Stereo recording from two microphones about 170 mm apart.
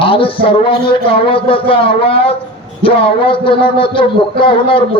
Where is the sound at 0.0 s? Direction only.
30° left (ahead or behind).